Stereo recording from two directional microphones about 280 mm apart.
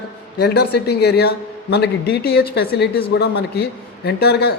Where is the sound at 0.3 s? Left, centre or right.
Left.